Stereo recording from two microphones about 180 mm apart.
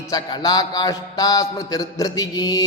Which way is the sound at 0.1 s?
20° left (ahead or behind).